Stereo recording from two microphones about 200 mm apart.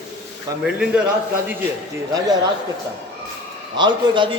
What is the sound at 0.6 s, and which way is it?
Speech, 5° right (ahead or behind).